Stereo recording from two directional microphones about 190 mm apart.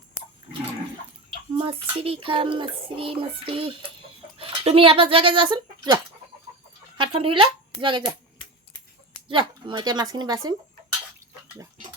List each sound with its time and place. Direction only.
1.5 s child singing: 30° right (ahead or behind)
4.4 s speech: 30° right (ahead or behind)
7.8 s child singing: 25° right (ahead or behind)
9.3 s child singing: 25° right (ahead or behind)